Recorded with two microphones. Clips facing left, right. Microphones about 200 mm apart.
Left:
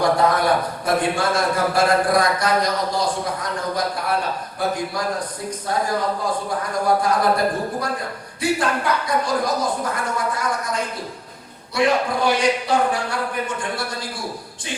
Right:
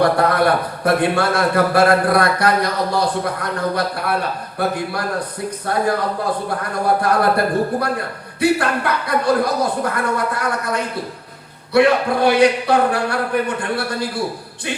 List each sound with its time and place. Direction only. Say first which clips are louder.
0.0 s a man's voice: right 3 dB; 60° right (ahead or behind)
6.6 s a man's voice: left 1 dB; 60° right (ahead or behind)